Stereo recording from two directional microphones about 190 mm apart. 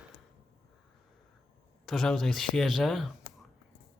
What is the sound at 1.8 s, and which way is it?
Speech, centre (ahead or behind).